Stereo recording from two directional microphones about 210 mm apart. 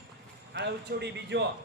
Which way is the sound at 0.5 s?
55° right (ahead or behind).